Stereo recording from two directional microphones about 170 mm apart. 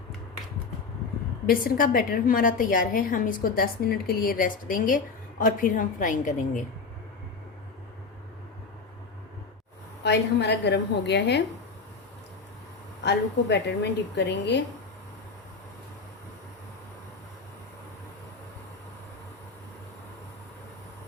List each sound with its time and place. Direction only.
1.5 s a woman's voice: 60° left (ahead or behind)
10.0 s a woman's voice: 85° left
13.1 s a woman's voice: 90° left